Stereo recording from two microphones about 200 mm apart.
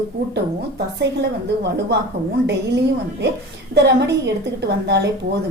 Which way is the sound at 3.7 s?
60° right (ahead or behind).